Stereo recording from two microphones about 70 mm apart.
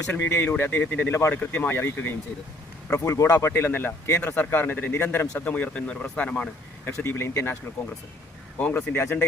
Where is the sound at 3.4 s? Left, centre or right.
Left.